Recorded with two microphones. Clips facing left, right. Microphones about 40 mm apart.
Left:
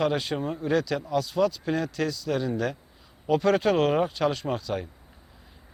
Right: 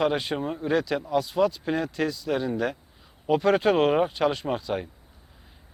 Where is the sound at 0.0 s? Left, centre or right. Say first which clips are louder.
Right 1 dB; centre.